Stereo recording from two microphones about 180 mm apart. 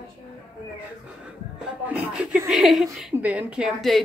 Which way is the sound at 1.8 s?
5° right (ahead or behind).